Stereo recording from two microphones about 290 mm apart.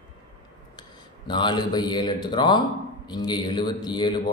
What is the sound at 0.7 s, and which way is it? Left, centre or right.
Speech, centre.